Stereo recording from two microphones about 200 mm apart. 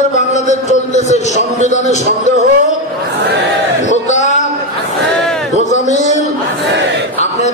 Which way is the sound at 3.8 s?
35° left (ahead or behind).